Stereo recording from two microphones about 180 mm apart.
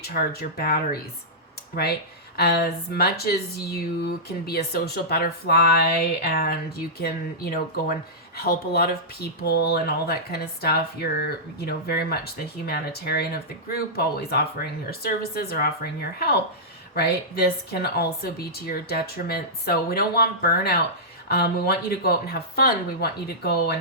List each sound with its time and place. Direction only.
0.0 s speech: 60° left (ahead or behind)